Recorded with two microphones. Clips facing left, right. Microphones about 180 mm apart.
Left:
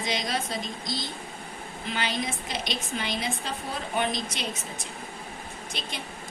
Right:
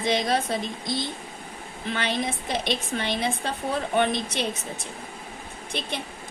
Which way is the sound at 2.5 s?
55° right (ahead or behind).